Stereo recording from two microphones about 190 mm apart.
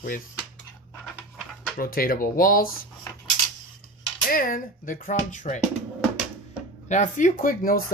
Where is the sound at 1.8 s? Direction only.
50° left (ahead or behind).